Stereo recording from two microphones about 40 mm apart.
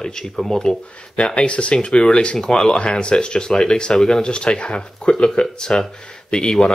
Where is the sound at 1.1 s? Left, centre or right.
Left.